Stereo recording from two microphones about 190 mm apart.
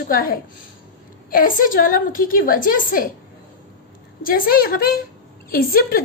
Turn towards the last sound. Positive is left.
turn(degrees=50)  # may be behind; listen again after turning